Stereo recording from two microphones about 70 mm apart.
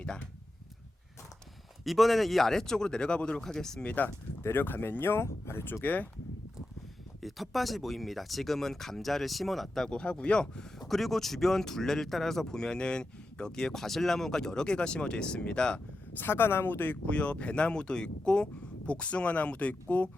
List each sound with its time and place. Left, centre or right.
1.8 s speech: centre
3.8 s speech: left
7.2 s speech: centre
16.1 s speech: left